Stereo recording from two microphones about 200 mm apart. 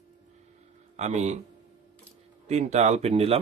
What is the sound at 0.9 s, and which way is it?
Speech, 35° right (ahead or behind).